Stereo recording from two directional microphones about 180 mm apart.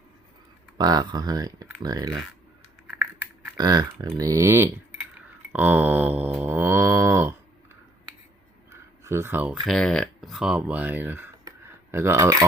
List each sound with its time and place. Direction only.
0.8 s speech: 20° right (ahead or behind)
2.9 s a sound: 5° right (ahead or behind)
3.6 s speech: 20° right (ahead or behind)
4.2 s typing: 20° right (ahead or behind)
5.5 s mantra: 10° right (ahead or behind)
8.7 s a sound: 15° right (ahead or behind)
9.6 s speech: 5° left (ahead or behind); by 12.5 s 15° right (ahead or behind)